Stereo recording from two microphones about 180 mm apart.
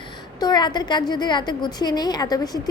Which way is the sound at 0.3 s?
25° left (ahead or behind).